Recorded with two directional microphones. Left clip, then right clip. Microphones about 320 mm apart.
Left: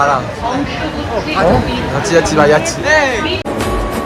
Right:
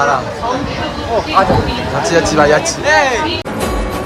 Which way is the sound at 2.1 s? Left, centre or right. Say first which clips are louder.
Left 1 dB; centre.